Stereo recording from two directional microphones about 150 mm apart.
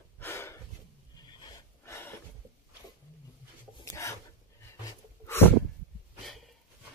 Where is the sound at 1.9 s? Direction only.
15° left (ahead or behind).